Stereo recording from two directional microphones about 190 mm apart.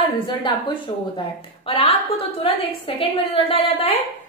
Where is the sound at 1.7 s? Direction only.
30° left (ahead or behind).